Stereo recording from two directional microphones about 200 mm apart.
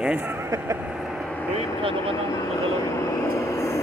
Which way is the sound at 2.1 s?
15° left (ahead or behind).